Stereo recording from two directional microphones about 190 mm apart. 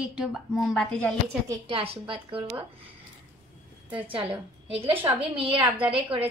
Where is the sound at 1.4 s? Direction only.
25° right (ahead or behind).